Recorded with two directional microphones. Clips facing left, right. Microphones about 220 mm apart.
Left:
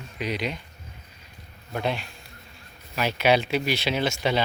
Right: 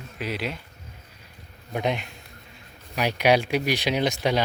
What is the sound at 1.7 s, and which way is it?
Speech, 15° right (ahead or behind).